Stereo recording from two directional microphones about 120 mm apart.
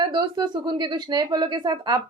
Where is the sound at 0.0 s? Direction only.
40° right (ahead or behind).